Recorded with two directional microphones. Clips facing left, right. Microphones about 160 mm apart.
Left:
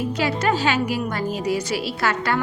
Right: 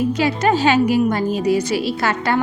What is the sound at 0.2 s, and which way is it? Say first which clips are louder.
A woman's voice: right 2 dB; 20° right (ahead or behind).